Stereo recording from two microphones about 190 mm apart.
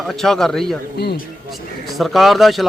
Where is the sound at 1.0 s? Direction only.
60° left (ahead or behind).